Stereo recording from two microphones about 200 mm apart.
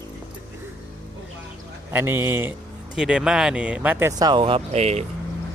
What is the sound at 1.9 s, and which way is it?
Speech, 10° right (ahead or behind).